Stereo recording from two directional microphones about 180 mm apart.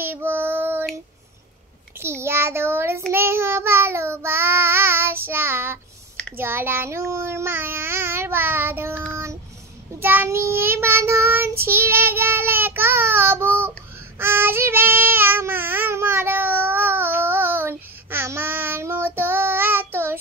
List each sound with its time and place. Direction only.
0.0 s child singing: 10° right (ahead or behind)
2.0 s a child's voice: 15° right (ahead or behind)
3.1 s child singing: 15° right (ahead or behind)